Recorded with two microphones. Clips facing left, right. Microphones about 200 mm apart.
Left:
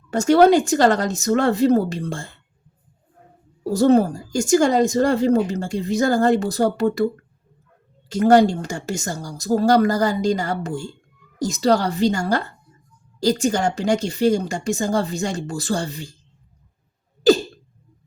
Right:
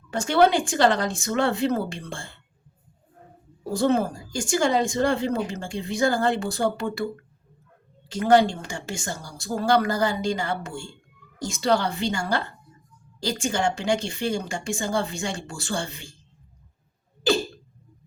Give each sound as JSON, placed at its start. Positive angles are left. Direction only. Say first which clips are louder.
{"t": 0.1, "sound": "speech", "louder": "left 6 dB", "side_deg": 40}
{"t": 3.7, "sound": "speech", "louder": "left 7 dB", "side_deg": 40}
{"t": 8.1, "sound": "speech", "louder": "left 5 dB", "side_deg": 40}
{"t": 17.2, "sound": "speech", "louder": "left 8 dB", "side_deg": 40}